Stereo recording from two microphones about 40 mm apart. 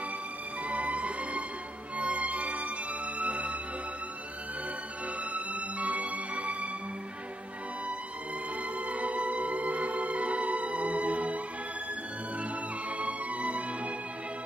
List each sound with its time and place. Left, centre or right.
0.7 s music: right
5.3 s music: right
8.7 s music: right
12.9 s music: right